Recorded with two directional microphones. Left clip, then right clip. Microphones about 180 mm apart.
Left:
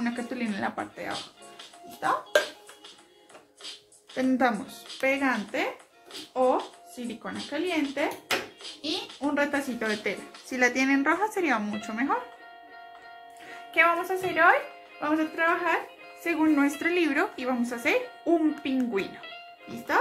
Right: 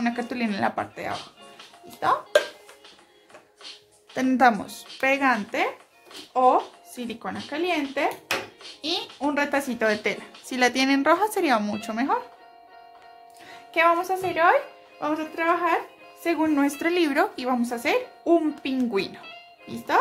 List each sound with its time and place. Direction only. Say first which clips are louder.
0.0 s speech: right 5 dB; 50° right (ahead or behind)
4.1 s a woman's voice: right 6 dB; 60° right (ahead or behind)
7.0 s a woman's voice: right 4 dB; 55° right (ahead or behind)
13.7 s speech: right 2 dB; 50° right (ahead or behind)
15.0 s a woman's voice: even; 60° right (ahead or behind)